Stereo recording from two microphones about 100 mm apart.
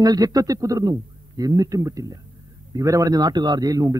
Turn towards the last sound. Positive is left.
turn(degrees=-40)  # may be behind; listen again after turning